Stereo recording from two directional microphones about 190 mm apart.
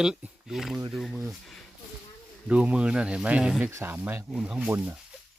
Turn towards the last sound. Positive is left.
turn(degrees=-10)  # may be behind; listen again after turning